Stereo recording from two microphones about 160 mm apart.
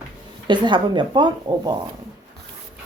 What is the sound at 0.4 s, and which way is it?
A child's voice, 30° right (ahead or behind).